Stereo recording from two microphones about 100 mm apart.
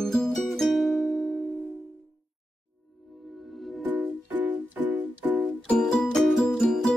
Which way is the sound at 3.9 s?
15° right (ahead or behind).